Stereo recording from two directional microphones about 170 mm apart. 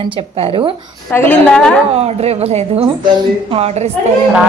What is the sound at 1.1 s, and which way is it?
Speech, 10° left (ahead or behind).